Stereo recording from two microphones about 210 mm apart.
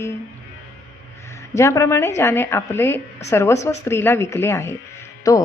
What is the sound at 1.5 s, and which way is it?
Speech, 15° left (ahead or behind).